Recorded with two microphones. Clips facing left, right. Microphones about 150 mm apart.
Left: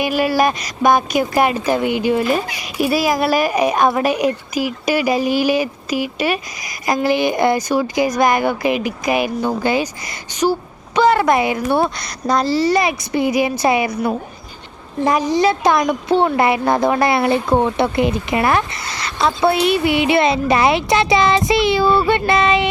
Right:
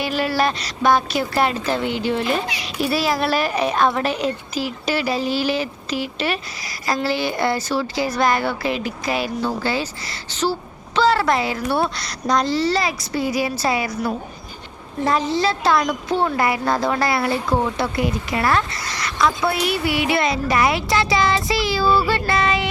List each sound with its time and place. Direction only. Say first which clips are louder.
0.0 s a woman's voice: left 4 dB; 10° left (ahead or behind)
15.0 s a woman's voice: left 4 dB; 15° left (ahead or behind)